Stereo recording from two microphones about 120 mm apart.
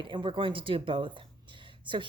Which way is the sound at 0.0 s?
40° right (ahead or behind).